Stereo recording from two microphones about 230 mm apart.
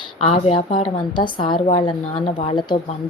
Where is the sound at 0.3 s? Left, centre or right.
Left.